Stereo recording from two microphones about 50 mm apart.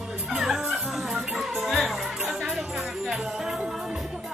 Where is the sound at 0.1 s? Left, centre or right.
Right.